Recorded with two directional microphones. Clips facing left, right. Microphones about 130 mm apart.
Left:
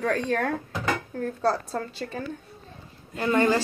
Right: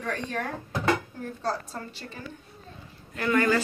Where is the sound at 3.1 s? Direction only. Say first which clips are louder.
Left 2 dB; 25° left (ahead or behind).